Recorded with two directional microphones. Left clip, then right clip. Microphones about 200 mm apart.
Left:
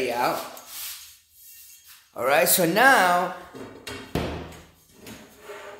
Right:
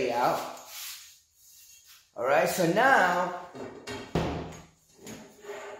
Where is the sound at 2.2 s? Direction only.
50° left (ahead or behind).